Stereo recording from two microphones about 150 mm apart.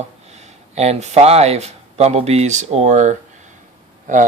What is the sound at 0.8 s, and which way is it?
Speech, 50° right (ahead or behind).